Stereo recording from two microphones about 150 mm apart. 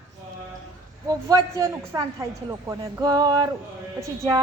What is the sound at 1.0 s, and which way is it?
A woman's voice, 20° right (ahead or behind).